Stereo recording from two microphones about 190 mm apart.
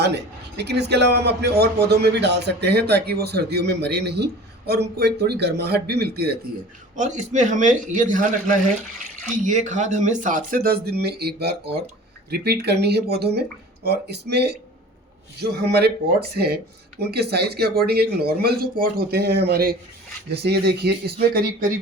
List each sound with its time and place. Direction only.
0.0 s a man's voice: 60° right (ahead or behind)
6.9 s a man's voice: 40° right (ahead or behind); by 21.7 s 55° right (ahead or behind)